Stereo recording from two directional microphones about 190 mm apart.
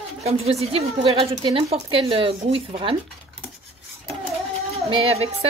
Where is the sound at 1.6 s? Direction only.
30° right (ahead or behind).